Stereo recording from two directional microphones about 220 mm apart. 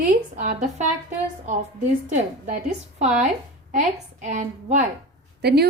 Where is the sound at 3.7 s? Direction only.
35° right (ahead or behind).